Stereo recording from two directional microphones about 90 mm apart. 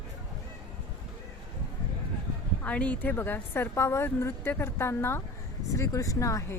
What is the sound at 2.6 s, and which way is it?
A woman's voice, 15° left (ahead or behind).